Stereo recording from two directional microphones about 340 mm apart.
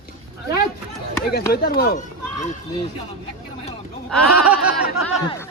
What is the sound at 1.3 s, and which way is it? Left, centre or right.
Speech, left.